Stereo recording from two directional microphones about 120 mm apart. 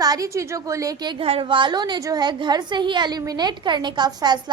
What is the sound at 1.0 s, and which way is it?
A woman's voice, 50° right (ahead or behind).